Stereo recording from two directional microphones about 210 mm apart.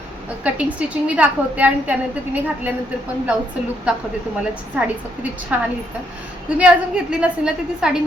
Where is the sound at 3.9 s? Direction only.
5° right (ahead or behind).